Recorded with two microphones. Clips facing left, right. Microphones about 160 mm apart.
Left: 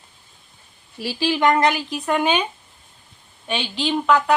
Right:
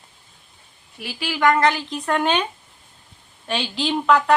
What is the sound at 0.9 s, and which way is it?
Speech, 30° left (ahead or behind).